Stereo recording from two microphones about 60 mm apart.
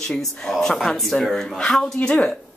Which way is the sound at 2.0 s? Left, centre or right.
Left.